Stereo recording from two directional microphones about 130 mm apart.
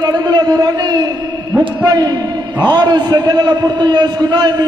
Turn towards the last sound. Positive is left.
turn(degrees=-30)  # may be behind; listen again after turning